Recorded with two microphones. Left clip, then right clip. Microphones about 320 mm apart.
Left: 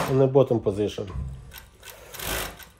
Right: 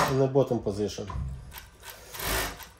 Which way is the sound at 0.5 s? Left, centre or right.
Left.